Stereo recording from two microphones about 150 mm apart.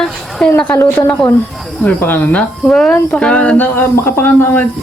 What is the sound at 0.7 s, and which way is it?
Speech, 10° left (ahead or behind).